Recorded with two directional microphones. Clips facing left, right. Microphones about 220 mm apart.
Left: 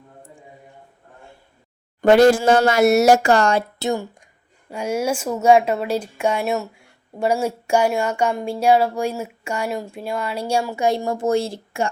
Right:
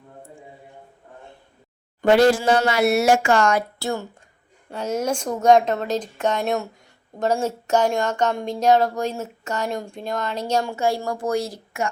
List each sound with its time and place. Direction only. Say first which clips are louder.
2.0 s speech: left 3 dB; 50° left (ahead or behind)
3.8 s speech: left 4 dB; 20° left (ahead or behind)
10.8 s a woman's voice: left 3 dB; 20° left (ahead or behind)